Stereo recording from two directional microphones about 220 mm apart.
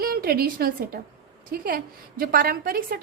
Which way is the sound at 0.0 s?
40° right (ahead or behind).